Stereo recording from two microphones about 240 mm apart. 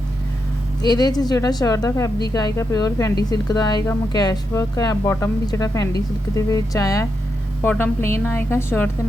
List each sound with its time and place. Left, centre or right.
0.8 s speech: centre